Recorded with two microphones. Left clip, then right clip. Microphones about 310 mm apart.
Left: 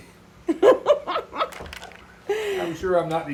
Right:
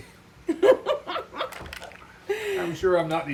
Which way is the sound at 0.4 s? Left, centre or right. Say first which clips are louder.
Left 3 dB; centre.